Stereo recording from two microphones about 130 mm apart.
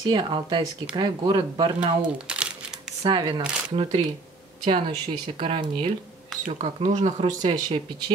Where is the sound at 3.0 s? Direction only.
35° right (ahead or behind).